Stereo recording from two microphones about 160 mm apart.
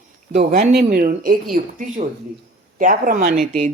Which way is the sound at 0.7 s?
80° right.